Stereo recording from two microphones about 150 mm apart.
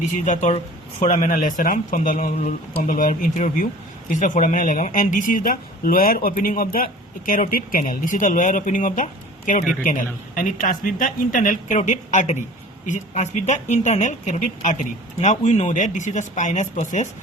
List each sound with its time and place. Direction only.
0.3 s speech: 50° left (ahead or behind)